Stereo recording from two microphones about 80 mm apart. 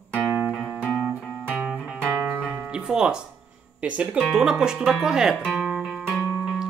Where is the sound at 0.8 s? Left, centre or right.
Centre.